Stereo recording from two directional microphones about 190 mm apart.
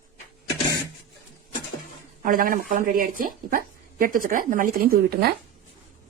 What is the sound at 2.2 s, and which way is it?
Speech, 50° right (ahead or behind).